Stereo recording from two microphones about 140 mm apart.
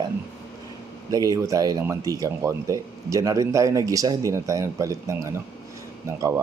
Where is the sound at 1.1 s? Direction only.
25° right (ahead or behind).